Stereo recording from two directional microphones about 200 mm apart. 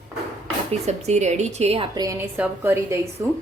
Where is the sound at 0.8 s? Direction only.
35° right (ahead or behind).